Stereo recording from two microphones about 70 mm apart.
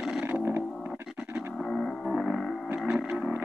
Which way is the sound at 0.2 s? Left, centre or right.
Right.